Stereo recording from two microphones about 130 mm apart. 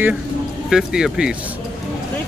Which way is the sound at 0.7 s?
5° right (ahead or behind).